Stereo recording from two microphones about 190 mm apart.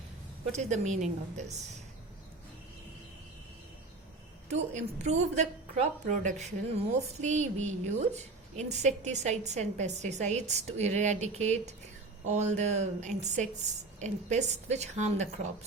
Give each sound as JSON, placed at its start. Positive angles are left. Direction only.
{"t": 0.5, "sound": "a woman's voice", "side_deg": -40}
{"t": 4.4, "sound": "a woman's voice", "side_deg": -35}